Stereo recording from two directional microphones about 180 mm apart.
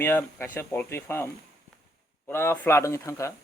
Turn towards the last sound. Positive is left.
turn(degrees=15)  # may be behind; listen again after turning